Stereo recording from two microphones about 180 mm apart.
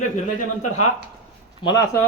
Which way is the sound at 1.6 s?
20° left (ahead or behind).